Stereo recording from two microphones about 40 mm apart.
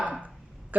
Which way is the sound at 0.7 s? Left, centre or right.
Right.